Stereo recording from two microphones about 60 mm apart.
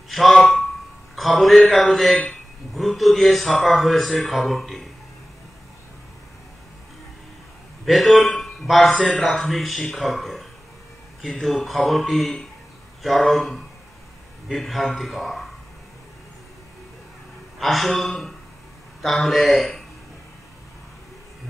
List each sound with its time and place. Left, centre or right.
0.1 s a man's voice: centre
7.8 s a man's voice: centre
8.9 s a man's voice: centre
9.2 s a man's voice: centre
17.6 s a man's voice: centre